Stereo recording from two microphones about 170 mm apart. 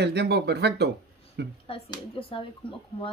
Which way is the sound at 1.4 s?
90° right.